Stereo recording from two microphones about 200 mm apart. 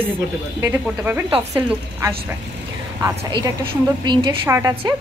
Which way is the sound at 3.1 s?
25° right (ahead or behind).